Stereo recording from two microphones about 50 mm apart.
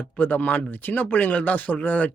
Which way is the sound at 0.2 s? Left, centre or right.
Left.